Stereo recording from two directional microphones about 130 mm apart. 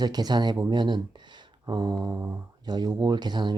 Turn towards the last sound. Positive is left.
turn(degrees=-35)  # may be behind; listen again after turning